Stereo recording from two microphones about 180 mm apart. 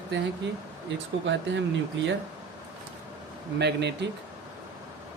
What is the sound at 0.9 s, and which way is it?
Speech, 80° right.